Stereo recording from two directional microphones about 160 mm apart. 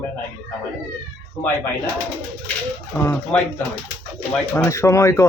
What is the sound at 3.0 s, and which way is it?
Speech, 10° left (ahead or behind).